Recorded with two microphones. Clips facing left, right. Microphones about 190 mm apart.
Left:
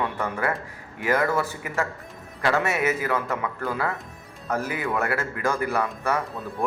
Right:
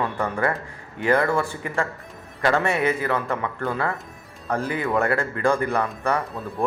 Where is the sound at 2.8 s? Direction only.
10° left (ahead or behind).